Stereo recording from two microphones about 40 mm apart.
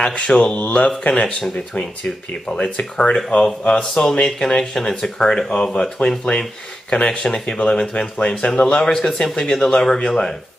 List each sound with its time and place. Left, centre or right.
0.0 s speech: left